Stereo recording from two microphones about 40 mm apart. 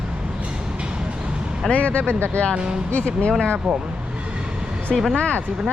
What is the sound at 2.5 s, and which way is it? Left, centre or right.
Speech, right.